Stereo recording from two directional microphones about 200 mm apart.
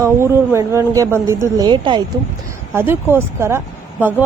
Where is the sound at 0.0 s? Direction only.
15° right (ahead or behind).